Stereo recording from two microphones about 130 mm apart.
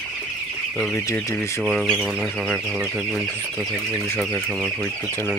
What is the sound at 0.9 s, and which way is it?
Speech, 20° left (ahead or behind).